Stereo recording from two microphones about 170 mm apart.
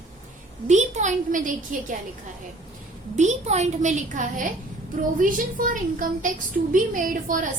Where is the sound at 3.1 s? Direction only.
40° right (ahead or behind).